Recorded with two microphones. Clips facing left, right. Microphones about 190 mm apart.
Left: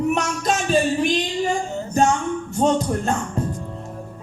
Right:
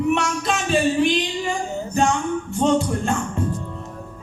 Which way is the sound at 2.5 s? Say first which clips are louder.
Even; 40° left (ahead or behind).